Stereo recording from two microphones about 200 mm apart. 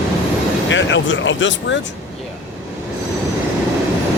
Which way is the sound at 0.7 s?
70° left (ahead or behind).